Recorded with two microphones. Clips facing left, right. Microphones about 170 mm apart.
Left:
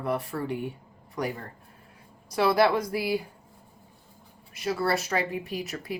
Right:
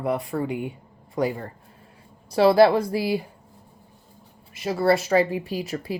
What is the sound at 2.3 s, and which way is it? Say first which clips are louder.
Speech: right 6 dB; 30° right (ahead or behind).